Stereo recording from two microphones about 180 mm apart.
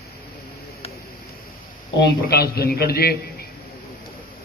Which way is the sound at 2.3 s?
60° left (ahead or behind).